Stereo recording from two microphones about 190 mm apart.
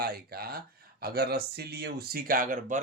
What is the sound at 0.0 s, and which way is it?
Speech, 55° right (ahead or behind).